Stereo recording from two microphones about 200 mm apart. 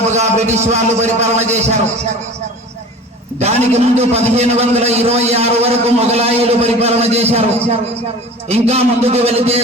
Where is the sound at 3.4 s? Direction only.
30° right (ahead or behind).